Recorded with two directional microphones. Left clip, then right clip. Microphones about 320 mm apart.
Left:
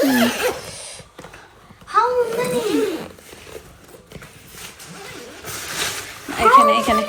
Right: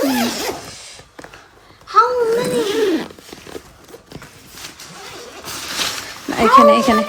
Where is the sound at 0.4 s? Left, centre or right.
Centre.